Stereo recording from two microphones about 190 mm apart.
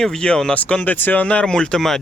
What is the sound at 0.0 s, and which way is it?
Speech, 5° left (ahead or behind).